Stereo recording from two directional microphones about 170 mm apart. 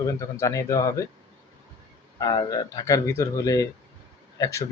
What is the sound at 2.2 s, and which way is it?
Speech, 20° left (ahead or behind).